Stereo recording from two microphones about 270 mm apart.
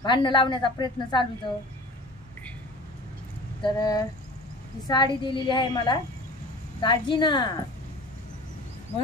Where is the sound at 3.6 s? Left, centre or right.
Centre.